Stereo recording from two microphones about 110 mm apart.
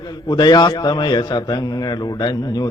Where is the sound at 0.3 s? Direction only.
40° left (ahead or behind).